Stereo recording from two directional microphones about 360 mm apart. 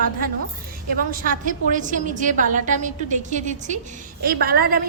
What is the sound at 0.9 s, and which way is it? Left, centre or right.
A woman's voice, right.